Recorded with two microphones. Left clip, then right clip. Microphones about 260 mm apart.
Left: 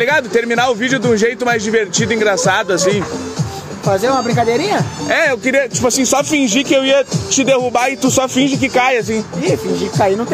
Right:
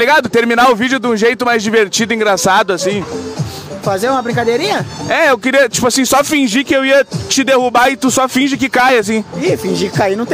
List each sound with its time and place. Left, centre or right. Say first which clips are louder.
0.0 s a man's voice: right 3 dB; right
3.9 s a man's voice: even; right
8.4 s speech: right 1 dB; right
8.7 s a man's voice: right 4 dB; right